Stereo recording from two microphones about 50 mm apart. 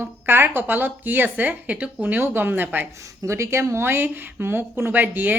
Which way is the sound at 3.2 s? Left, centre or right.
Right.